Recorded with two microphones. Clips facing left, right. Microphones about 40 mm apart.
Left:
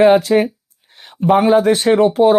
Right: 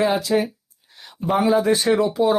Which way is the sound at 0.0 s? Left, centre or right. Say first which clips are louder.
Left 9 dB; left.